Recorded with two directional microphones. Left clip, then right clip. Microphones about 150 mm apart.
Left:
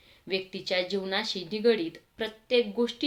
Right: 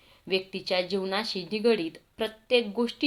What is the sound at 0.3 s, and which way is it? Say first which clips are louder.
Speech: right 2 dB; 10° right (ahead or behind).